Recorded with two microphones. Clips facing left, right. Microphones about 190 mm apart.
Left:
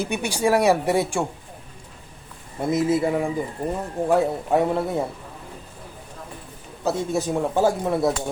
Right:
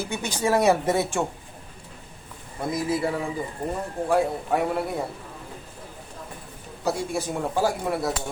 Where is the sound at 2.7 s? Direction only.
25° left (ahead or behind).